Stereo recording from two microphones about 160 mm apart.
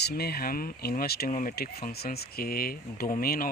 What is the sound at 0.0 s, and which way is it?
Speech, 75° left (ahead or behind).